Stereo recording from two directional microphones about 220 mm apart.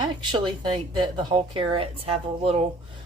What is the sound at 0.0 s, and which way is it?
Speech, 20° right (ahead or behind).